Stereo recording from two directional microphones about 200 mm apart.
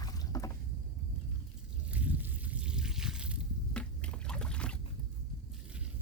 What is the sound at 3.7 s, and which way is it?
Boat, 5° left (ahead or behind).